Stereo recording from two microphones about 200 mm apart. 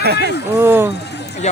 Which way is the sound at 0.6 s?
10° right (ahead or behind).